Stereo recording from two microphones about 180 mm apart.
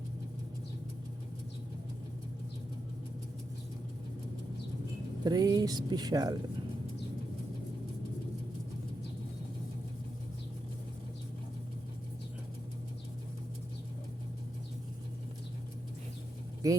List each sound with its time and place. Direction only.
5.2 s speech: 20° right (ahead or behind)
16.6 s speech: 20° right (ahead or behind)